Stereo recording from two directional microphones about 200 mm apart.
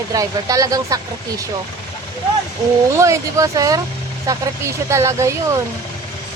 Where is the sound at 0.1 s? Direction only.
15° right (ahead or behind).